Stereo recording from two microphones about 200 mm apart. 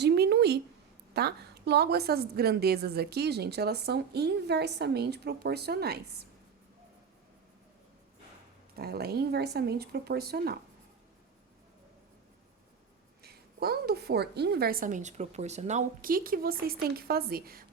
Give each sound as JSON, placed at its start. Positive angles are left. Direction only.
{"t": 0.0, "sound": "a sound", "side_deg": -55}
{"t": 1.1, "sound": "a woman's voice", "side_deg": -55}
{"t": 8.7, "sound": "a woman's voice", "side_deg": -50}
{"t": 13.2, "sound": "a woman's voice", "side_deg": -50}